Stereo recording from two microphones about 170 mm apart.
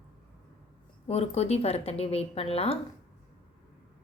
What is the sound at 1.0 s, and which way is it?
A woman's voice, 40° left (ahead or behind).